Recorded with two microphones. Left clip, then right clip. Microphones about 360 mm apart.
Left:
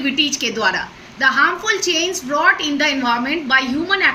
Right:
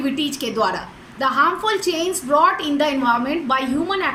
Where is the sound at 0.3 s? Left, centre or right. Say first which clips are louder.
Left 3 dB; centre.